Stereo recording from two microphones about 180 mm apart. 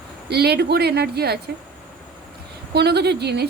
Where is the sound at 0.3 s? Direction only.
65° right (ahead or behind).